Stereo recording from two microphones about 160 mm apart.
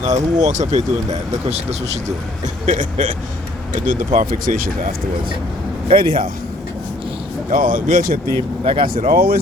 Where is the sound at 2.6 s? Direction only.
55° right (ahead or behind).